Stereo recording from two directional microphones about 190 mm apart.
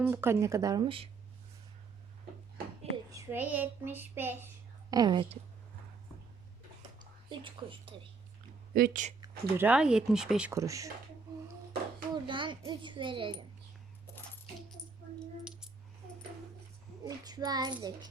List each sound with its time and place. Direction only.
0.0 s speech: 10° right (ahead or behind); by 1.1 s 30° right (ahead or behind)
3.1 s child singing: 15° right (ahead or behind)
7.0 s speech: 25° right (ahead or behind)
8.7 s speech: 45° right (ahead or behind)
9.2 s speech: 10° right (ahead or behind)
10.5 s speech: 15° right (ahead or behind)
12.1 s a sound: 25° right (ahead or behind)
17.0 s a child's voice: 20° right (ahead or behind)